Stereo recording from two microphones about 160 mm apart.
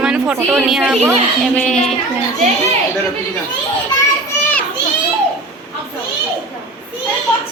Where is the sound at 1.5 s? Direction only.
5° left (ahead or behind).